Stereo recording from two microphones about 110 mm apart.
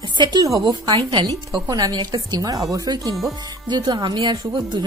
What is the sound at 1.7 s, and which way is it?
Speech, 35° right (ahead or behind).